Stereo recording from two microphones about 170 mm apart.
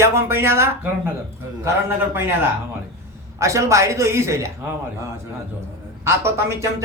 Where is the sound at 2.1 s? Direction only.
15° right (ahead or behind).